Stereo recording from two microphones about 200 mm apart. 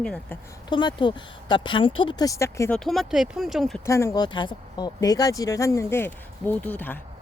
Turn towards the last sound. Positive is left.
turn(degrees=10)  # may be behind; listen again after turning